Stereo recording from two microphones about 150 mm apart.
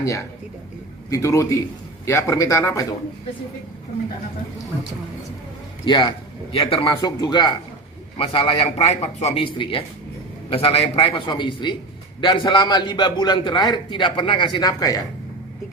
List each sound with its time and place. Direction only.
0.0 s a man's voice: 20° left (ahead or behind)
5.8 s a man's voice: 30° left (ahead or behind)